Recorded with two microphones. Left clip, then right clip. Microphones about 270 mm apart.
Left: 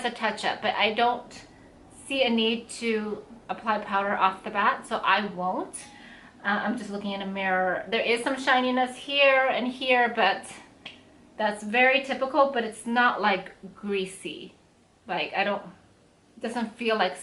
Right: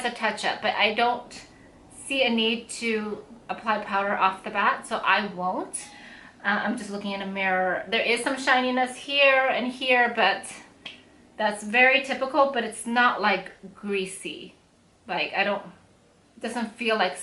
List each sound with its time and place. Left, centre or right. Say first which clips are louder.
0.0 s a woman's voice: right 1 dB; centre
5.4 s speech: right 1 dB; centre
6.4 s a woman's voice: right 2 dB; centre